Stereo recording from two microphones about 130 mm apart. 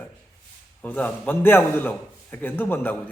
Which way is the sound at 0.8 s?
10° left (ahead or behind).